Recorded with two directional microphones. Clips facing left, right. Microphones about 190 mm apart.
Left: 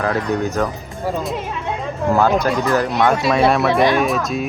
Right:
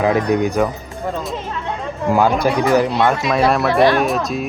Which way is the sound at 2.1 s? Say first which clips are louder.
Right 1 dB; 10° right (ahead or behind).